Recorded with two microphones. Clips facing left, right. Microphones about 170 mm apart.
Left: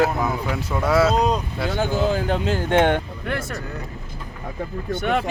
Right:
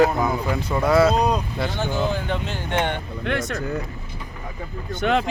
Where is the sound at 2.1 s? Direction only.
40° left (ahead or behind).